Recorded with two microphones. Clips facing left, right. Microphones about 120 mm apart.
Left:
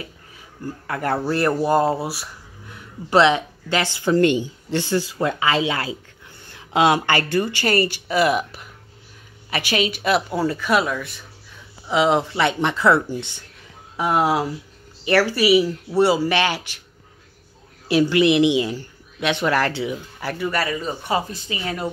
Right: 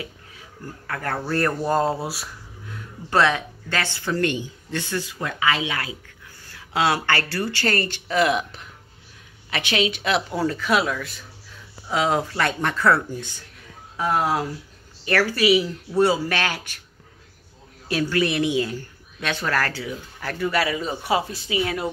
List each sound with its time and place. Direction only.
0.8 s speech: 15° left (ahead or behind)
3.1 s speech: 20° left (ahead or behind)
6.4 s speech: 20° left (ahead or behind)
17.9 s speech: 15° left (ahead or behind)
20.6 s speech: 5° right (ahead or behind)